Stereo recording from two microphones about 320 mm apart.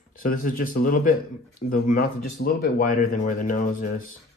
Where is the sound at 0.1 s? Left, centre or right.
Left.